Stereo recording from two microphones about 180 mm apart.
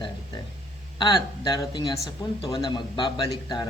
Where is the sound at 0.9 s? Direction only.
25° left (ahead or behind).